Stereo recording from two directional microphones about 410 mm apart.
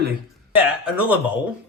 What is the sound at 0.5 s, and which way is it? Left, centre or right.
Speech, centre.